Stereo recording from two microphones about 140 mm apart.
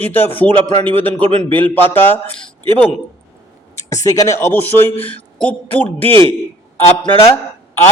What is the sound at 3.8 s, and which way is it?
A man's voice, 20° left (ahead or behind).